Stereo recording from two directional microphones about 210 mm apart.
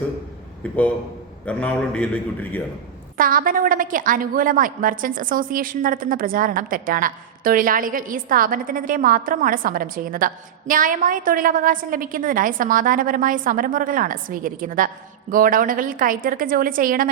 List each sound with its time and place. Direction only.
1.5 s a man's voice: 5° left (ahead or behind)
3.2 s a woman's voice: 40° right (ahead or behind)